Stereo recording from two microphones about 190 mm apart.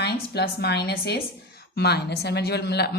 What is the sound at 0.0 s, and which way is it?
A woman's voice, 60° left (ahead or behind).